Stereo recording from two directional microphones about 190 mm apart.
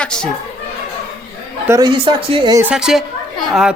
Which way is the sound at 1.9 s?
25° right (ahead or behind).